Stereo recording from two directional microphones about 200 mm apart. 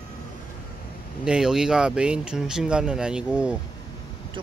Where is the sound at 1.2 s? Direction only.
5° right (ahead or behind).